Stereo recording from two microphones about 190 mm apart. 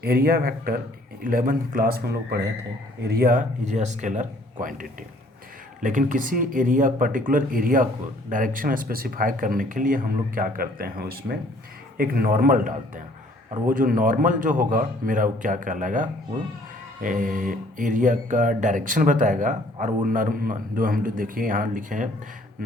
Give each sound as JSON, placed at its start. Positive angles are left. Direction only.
{"t": 0.0, "sound": "speech", "side_deg": -55}
{"t": 5.8, "sound": "speech", "side_deg": -45}